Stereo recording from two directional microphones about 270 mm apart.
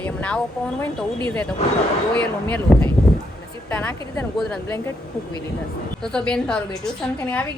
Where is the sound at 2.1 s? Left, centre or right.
Centre.